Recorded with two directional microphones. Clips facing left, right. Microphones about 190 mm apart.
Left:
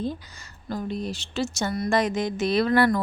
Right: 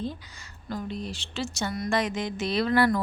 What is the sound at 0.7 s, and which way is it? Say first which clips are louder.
Speech: left 4 dB; 45° left (ahead or behind).